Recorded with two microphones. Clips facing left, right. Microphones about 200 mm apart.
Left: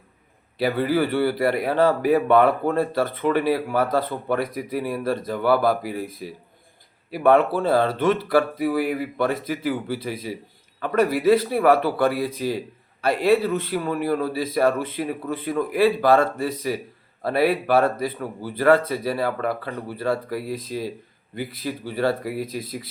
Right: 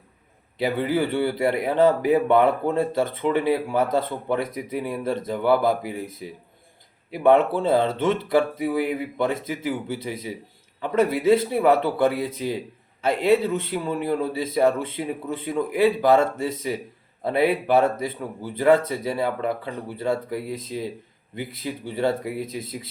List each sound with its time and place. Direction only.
0.6 s speech: 20° right (ahead or behind)